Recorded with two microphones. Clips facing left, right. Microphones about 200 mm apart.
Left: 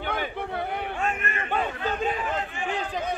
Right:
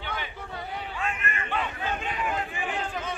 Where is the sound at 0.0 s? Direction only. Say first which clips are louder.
Left 7 dB; 50° left (ahead or behind).